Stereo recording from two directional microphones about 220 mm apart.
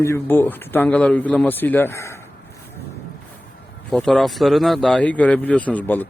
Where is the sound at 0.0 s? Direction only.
10° left (ahead or behind).